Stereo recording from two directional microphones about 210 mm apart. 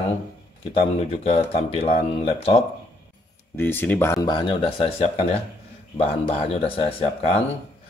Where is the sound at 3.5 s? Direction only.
10° left (ahead or behind); by 5.2 s 25° left (ahead or behind).